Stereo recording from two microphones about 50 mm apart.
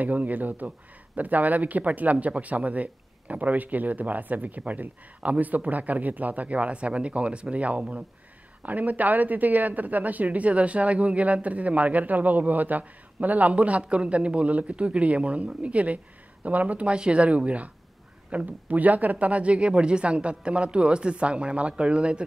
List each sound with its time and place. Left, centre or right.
0.0 s speech: right